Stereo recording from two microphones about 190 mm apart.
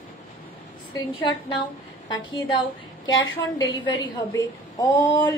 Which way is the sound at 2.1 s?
25° left (ahead or behind).